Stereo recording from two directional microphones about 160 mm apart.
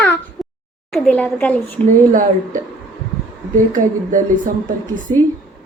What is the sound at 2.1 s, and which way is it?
Speech, 55° right (ahead or behind).